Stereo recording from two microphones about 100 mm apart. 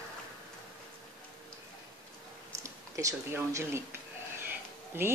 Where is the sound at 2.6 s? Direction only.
30° right (ahead or behind).